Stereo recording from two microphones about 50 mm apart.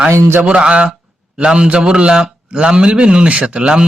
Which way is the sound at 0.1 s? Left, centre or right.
Right.